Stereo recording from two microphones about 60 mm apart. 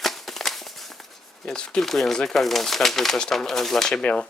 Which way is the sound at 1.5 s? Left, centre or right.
Centre.